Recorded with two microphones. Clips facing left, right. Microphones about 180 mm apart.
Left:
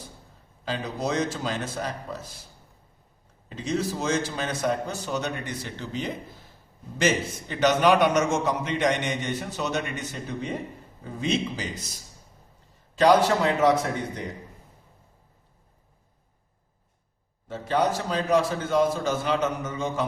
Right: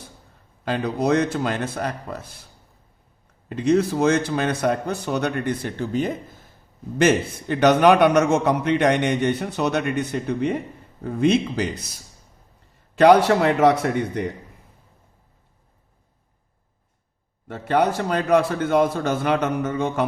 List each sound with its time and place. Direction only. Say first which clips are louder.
0.6 s a man's voice: right 7 dB; 60° right (ahead or behind)
3.5 s a man's voice: right 9 dB; 60° right (ahead or behind)
13.0 s a man's voice: right 5 dB; 60° right (ahead or behind)
17.5 s a man's voice: right 4 dB; 60° right (ahead or behind)